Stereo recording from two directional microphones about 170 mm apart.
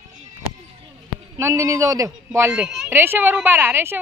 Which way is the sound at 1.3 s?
20° right (ahead or behind).